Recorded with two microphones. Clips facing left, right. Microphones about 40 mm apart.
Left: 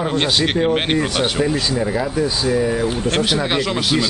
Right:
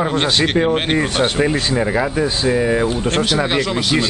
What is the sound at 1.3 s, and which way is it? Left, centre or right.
Speech, right.